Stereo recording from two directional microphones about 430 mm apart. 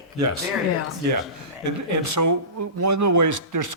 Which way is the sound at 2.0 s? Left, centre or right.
Right.